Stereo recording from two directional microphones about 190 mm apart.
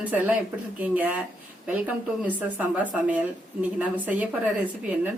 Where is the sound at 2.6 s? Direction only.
10° right (ahead or behind).